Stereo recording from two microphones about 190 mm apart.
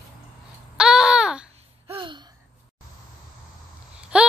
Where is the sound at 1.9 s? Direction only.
25° right (ahead or behind).